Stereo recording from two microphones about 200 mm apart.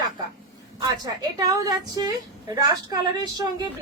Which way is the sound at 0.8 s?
20° right (ahead or behind).